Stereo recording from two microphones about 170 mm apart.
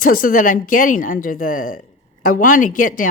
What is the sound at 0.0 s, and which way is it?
A woman's voice, 55° left (ahead or behind).